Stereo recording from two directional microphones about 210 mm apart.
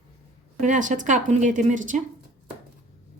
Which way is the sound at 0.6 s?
35° right (ahead or behind).